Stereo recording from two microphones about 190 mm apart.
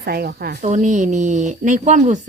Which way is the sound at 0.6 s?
40° right (ahead or behind).